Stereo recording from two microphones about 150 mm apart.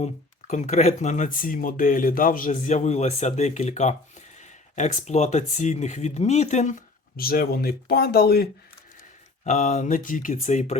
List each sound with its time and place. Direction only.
0.0 s speech: 50° left (ahead or behind); by 8.4 s 90° left
9.4 s speech: 50° left (ahead or behind)